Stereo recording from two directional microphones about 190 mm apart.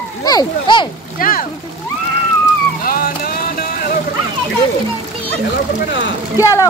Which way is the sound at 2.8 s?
50° left (ahead or behind).